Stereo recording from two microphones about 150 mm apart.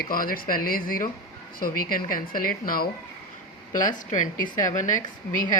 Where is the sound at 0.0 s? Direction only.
75° left (ahead or behind).